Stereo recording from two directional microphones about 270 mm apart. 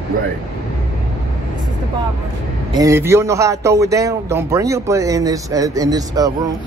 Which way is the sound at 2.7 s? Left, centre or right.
Centre.